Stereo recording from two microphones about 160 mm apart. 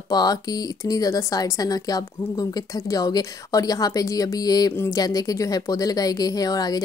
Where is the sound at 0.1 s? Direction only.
25° left (ahead or behind).